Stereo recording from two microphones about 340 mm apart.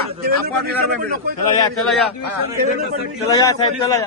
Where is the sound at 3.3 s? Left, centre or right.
Centre.